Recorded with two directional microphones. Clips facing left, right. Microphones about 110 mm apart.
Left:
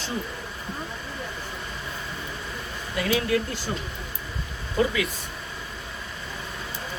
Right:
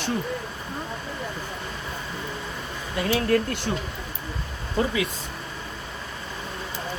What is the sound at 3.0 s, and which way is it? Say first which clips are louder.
Speech: even; 35° right (ahead or behind).